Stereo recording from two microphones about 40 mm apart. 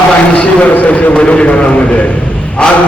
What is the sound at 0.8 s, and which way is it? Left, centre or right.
Speech, left.